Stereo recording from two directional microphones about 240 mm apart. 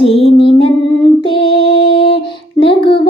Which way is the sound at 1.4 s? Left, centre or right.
Left.